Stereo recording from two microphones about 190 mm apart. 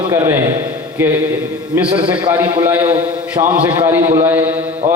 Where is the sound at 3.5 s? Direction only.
25° right (ahead or behind).